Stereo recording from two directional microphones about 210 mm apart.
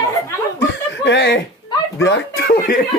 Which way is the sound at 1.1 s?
50° left (ahead or behind).